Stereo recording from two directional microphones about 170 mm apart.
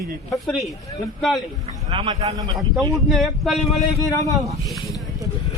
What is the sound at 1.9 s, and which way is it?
Speech, 25° right (ahead or behind).